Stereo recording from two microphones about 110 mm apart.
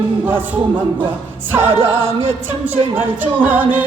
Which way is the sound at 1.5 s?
20° right (ahead or behind).